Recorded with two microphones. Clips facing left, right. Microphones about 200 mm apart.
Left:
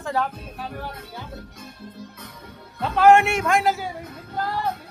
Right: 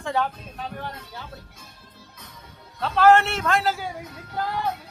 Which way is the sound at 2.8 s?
15° left (ahead or behind).